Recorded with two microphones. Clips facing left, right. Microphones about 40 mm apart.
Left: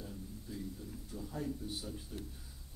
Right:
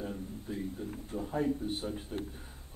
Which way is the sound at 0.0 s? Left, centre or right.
Right.